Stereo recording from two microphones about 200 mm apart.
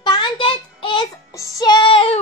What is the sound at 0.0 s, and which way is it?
Child singing, 20° left (ahead or behind).